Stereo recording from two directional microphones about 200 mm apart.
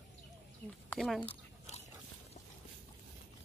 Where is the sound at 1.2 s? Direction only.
30° left (ahead or behind).